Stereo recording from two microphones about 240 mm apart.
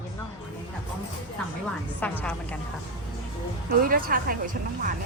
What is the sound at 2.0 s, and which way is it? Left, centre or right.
Speech, centre.